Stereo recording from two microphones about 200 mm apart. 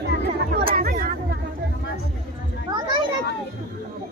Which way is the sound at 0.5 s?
45° right (ahead or behind).